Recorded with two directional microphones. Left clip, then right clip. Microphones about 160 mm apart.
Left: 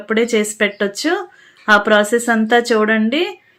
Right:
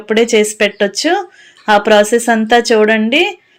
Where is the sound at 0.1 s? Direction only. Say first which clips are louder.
Right 5 dB; 20° right (ahead or behind).